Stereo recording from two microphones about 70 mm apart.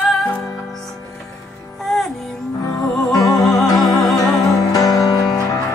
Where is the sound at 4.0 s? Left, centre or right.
Centre.